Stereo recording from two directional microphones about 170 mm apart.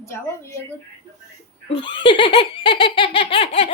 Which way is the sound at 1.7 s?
30° left (ahead or behind).